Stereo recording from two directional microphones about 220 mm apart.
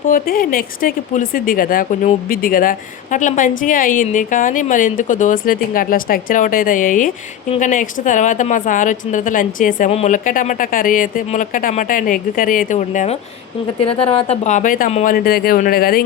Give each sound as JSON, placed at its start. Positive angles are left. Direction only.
{"t": 0.1, "sound": "speech", "side_deg": 40}